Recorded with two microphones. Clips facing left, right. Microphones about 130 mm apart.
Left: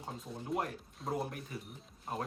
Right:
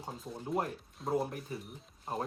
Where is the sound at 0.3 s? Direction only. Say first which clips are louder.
Right 2 dB; centre (ahead or behind).